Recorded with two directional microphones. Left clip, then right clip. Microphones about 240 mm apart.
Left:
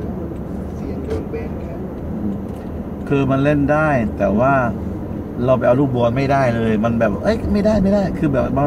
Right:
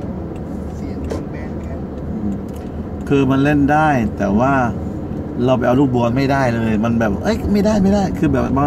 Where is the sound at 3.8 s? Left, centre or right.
Centre.